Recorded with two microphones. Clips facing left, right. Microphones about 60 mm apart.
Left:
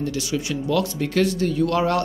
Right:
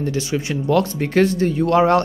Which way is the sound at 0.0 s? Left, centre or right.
Right.